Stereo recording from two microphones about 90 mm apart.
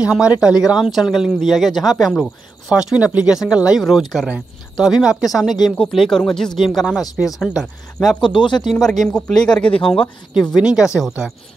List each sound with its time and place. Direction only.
0.0 s speech: 10° right (ahead or behind)
8.2 s speech: 65° left (ahead or behind)
8.6 s speech: 5° left (ahead or behind)
10.5 s speech: 5° right (ahead or behind)